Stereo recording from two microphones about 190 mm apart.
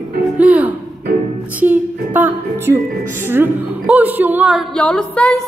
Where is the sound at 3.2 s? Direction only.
10° right (ahead or behind).